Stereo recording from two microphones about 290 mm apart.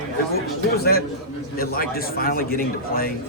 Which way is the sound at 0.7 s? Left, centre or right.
Left.